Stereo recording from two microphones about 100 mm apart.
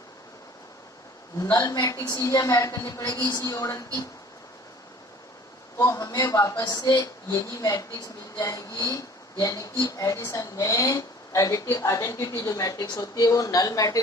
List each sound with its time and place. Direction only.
1.4 s a woman's voice: 40° left (ahead or behind)
5.7 s a woman's voice: 30° left (ahead or behind)